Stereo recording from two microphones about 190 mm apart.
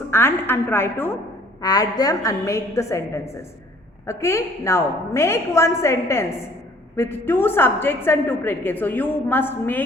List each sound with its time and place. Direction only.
0.1 s a woman's voice: 10° left (ahead or behind)